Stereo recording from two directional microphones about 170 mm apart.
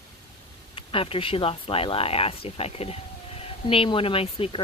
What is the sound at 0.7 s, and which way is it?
Speech, 35° left (ahead or behind).